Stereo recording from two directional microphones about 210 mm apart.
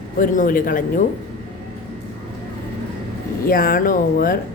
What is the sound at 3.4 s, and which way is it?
Speech, 40° left (ahead or behind).